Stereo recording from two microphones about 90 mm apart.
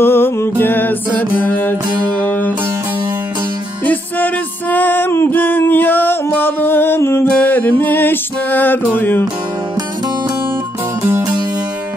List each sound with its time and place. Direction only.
0.0 s music: 25° left (ahead or behind)
3.8 s music: 20° left (ahead or behind)
11.0 s music: 30° right (ahead or behind)